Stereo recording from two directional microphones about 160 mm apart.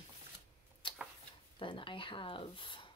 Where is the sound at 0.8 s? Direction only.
30° left (ahead or behind).